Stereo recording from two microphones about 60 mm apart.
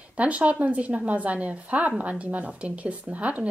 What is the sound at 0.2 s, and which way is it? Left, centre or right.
A woman's voice, right.